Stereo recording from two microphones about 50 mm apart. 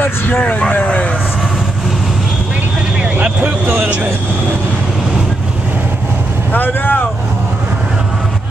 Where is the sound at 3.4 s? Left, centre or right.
Right.